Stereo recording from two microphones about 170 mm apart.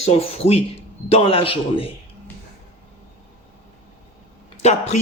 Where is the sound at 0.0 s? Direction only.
35° left (ahead or behind).